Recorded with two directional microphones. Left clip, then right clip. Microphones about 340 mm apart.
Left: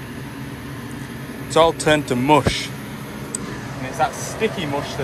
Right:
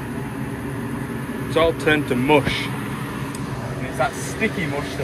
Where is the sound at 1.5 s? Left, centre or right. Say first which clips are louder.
Left 3 dB; centre.